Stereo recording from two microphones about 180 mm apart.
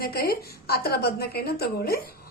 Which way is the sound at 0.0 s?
55° left (ahead or behind).